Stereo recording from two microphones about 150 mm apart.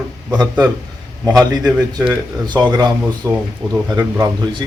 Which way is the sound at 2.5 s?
30° right (ahead or behind).